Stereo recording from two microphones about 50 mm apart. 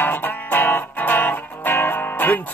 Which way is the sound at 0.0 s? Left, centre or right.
Left.